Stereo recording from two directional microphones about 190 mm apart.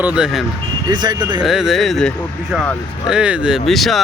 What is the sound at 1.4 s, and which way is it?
Speech, 5° right (ahead or behind).